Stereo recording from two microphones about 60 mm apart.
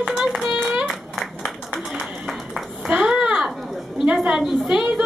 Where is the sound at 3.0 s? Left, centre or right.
Centre.